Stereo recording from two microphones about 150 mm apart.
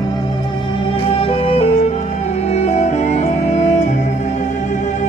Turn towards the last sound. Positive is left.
turn(degrees=50)  # may be behind; listen again after turning